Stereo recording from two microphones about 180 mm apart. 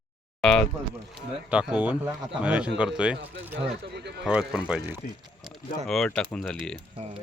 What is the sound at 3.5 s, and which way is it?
Speech, 70° right (ahead or behind).